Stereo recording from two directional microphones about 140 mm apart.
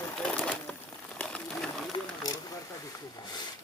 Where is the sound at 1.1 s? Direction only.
5° left (ahead or behind).